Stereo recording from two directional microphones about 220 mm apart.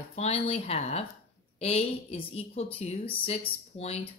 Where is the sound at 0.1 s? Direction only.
30° left (ahead or behind).